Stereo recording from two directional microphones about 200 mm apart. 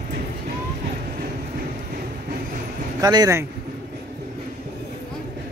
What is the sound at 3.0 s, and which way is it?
Speech, 20° right (ahead or behind).